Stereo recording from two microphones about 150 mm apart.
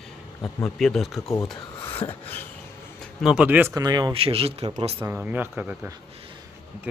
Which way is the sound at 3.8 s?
25° right (ahead or behind).